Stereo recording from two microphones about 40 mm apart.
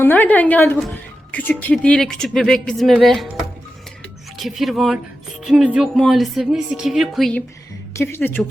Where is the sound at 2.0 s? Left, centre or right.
Centre.